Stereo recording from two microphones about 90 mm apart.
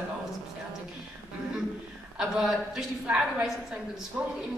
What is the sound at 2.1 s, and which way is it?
A woman's voice, 5° right (ahead or behind).